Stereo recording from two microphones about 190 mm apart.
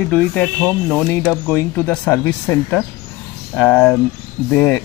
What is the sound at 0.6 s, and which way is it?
Speech, centre (ahead or behind).